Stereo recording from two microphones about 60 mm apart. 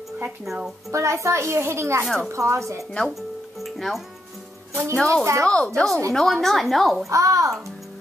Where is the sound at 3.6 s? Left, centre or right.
Centre.